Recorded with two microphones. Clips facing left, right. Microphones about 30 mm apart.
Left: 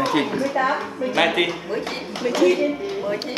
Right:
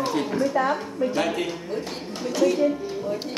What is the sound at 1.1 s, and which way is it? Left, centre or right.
Speech, left.